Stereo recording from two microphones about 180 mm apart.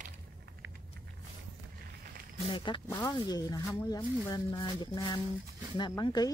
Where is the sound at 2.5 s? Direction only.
30° left (ahead or behind).